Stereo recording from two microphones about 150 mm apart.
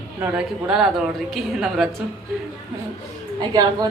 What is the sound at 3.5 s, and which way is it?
Speech, 25° right (ahead or behind).